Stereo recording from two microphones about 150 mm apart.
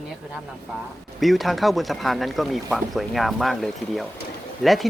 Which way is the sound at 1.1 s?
Centre (ahead or behind).